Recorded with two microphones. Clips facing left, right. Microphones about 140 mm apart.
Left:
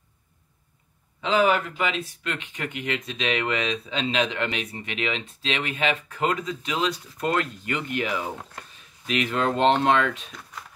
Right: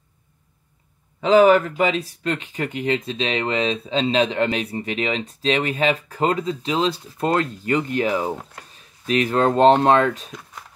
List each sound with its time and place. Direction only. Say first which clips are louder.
1.2 s speech: right 8 dB; 40° right (ahead or behind)